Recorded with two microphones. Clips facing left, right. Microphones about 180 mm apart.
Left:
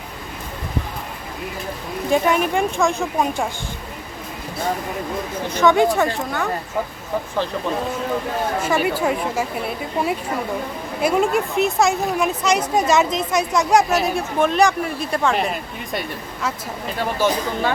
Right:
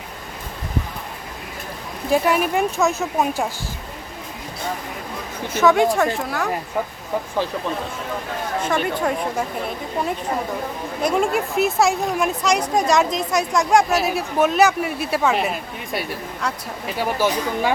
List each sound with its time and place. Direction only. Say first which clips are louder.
2.0 s a woman's voice: even; 5° right (ahead or behind)
5.5 s a woman's voice: even; centre (ahead or behind)
8.6 s a woman's voice: left 1 dB; 5° left (ahead or behind); by 17.7 s 10° right (ahead or behind)